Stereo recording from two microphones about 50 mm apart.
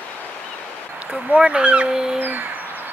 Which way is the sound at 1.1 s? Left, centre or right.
Right.